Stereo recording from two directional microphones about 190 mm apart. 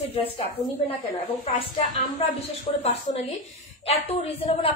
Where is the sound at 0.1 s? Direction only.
30° left (ahead or behind).